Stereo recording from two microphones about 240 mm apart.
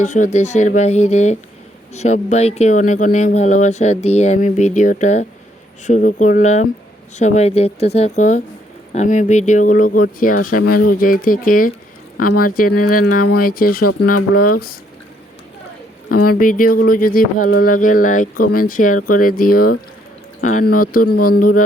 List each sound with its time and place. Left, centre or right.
0.0 s speech: left
16.0 s speech: left